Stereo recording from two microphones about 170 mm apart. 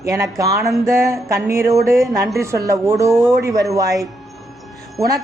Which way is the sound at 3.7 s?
20° right (ahead or behind).